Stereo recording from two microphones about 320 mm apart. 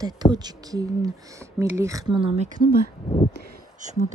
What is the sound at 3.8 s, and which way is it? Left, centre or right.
Speech, right.